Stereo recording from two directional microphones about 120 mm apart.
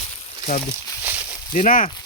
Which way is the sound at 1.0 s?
15° right (ahead or behind).